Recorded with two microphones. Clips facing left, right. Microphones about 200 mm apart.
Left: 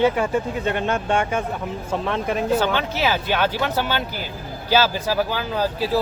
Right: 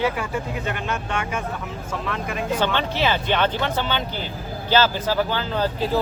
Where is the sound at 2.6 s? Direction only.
5° left (ahead or behind).